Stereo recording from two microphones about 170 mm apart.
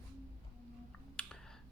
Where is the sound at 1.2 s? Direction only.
5° left (ahead or behind).